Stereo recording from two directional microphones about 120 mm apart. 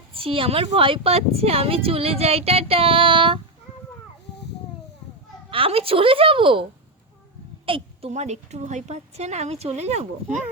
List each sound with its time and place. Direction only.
0.1 s a woman's voice: 50° right (ahead or behind)
5.5 s a woman's voice: 50° right (ahead or behind)
7.6 s a sound: 50° right (ahead or behind)
8.1 s a woman's voice: 70° right (ahead or behind)